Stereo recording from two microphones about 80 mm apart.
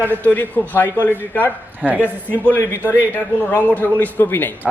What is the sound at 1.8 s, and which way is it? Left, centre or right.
Speech, centre.